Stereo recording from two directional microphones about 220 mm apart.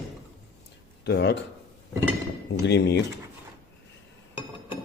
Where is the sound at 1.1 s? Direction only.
50° left (ahead or behind).